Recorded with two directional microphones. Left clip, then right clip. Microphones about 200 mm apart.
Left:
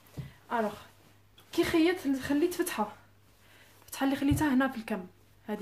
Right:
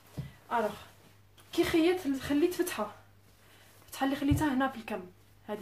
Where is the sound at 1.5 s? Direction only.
40° left (ahead or behind).